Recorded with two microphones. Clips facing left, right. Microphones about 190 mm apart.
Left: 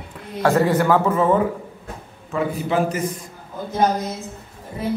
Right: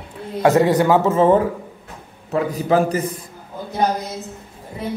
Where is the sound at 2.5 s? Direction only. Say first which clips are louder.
Right 5 dB; 35° right (ahead or behind).